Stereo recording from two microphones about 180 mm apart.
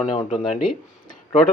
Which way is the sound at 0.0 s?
40° left (ahead or behind).